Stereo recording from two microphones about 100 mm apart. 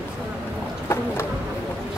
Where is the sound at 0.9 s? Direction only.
25° left (ahead or behind).